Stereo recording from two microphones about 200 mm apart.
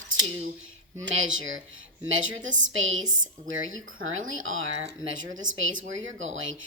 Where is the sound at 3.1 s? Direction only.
75° right (ahead or behind).